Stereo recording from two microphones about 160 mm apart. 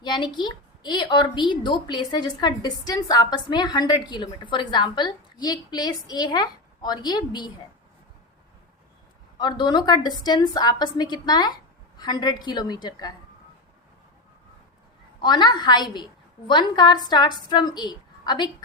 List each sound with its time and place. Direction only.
0.0 s a woman's voice: 30° left (ahead or behind)
9.4 s a woman's voice: 25° left (ahead or behind)
15.2 s a woman's voice: 30° left (ahead or behind)